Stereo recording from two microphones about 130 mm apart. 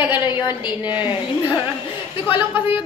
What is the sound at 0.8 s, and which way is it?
Speech, 10° right (ahead or behind).